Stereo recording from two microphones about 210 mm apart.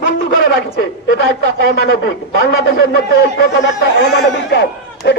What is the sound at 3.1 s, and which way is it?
Speech, 50° left (ahead or behind).